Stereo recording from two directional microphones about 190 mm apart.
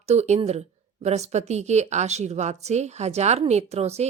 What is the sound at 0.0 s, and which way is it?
A woman's voice, 35° right (ahead or behind).